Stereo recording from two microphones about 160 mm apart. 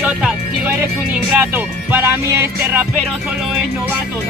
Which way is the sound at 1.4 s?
10° right (ahead or behind).